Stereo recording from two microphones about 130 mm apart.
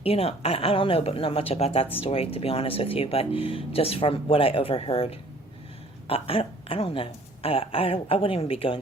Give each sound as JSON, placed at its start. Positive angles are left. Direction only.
{"t": 0.0, "sound": "speech", "side_deg": 50}